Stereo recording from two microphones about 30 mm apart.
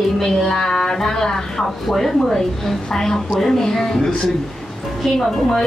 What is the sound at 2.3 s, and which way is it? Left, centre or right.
A woman's voice, centre.